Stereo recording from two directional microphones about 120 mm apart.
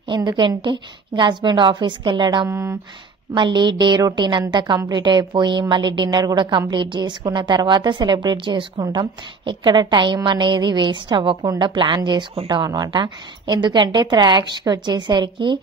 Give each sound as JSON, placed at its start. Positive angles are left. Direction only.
{"t": 0.1, "sound": "a woman's voice", "side_deg": -40}
{"t": 2.5, "sound": "speech", "side_deg": -20}
{"t": 3.3, "sound": "a woman's voice", "side_deg": -40}